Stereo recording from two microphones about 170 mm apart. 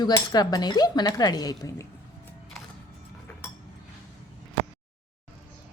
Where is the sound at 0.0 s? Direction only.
20° left (ahead or behind).